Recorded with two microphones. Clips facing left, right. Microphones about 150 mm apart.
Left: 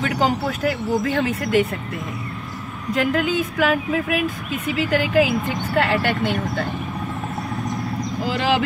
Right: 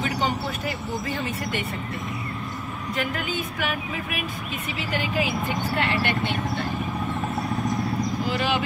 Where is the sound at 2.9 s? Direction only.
90° left.